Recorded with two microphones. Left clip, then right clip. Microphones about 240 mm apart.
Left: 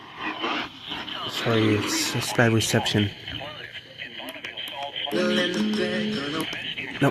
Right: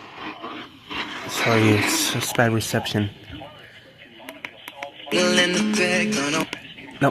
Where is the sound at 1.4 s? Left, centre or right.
Right.